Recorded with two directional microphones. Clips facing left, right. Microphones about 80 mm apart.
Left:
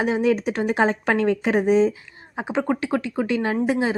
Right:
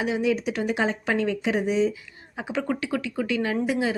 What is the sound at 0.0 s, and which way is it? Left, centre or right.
Speech, left.